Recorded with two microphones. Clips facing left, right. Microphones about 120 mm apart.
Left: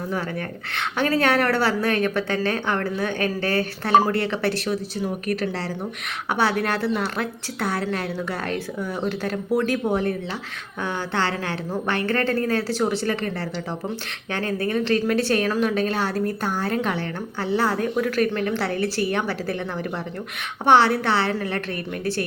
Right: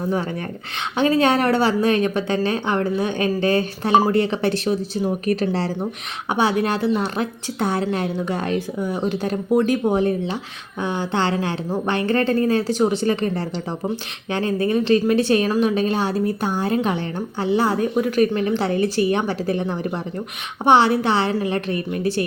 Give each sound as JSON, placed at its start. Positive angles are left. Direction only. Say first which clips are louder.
{"t": 0.8, "sound": "a woman's voice", "louder": "right 4 dB", "side_deg": -20}